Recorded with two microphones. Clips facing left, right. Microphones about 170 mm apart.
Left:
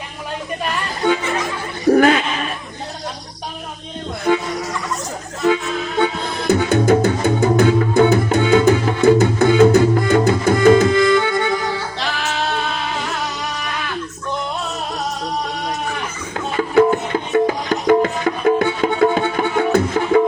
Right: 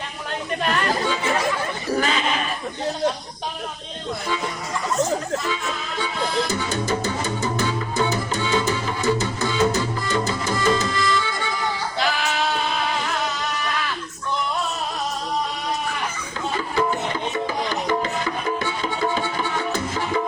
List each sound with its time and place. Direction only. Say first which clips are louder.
1.9 s speech: left 11 dB; 60° left (ahead or behind)
4.3 s speech: left 12 dB; 60° left (ahead or behind)
6.0 s music: left 4 dB; 60° left (ahead or behind)
17.3 s music: left 8 dB; 65° left (ahead or behind)